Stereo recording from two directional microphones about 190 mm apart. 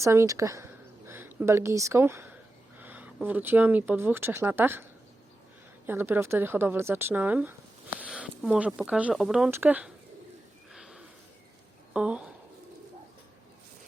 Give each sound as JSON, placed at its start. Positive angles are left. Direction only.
{"t": 0.0, "sound": "speech", "side_deg": -15}
{"t": 10.7, "sound": "a sound", "side_deg": -5}
{"t": 11.9, "sound": "speech", "side_deg": -5}